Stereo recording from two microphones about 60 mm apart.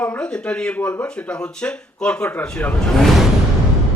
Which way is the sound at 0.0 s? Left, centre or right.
Centre.